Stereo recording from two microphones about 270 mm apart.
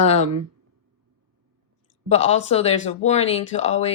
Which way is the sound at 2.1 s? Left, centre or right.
Left.